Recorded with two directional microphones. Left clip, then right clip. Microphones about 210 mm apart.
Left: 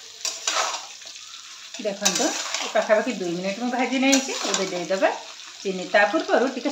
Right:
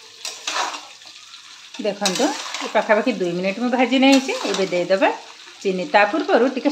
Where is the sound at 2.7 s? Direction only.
45° right (ahead or behind).